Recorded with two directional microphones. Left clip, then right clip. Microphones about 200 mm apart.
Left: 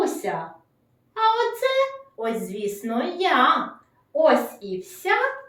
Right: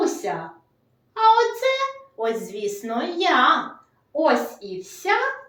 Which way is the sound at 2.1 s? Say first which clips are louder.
Right 3 dB; 10° right (ahead or behind).